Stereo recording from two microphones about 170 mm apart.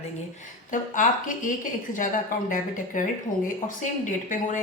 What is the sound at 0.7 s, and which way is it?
Speech, 50° left (ahead or behind).